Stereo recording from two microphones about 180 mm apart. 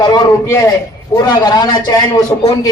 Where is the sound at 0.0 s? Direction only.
20° left (ahead or behind).